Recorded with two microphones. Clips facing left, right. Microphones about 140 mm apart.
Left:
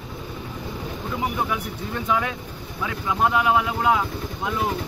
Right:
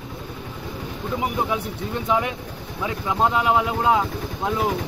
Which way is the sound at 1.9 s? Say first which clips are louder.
Right 2 dB; 20° right (ahead or behind).